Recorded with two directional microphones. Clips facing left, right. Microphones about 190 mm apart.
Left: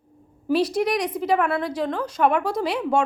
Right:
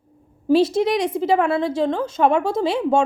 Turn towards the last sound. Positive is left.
turn(degrees=-25)  # may be behind; listen again after turning